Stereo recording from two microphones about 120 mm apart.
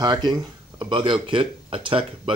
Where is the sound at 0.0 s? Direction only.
35° right (ahead or behind).